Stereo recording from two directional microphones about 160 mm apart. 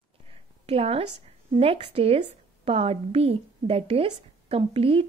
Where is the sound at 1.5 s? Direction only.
35° right (ahead or behind).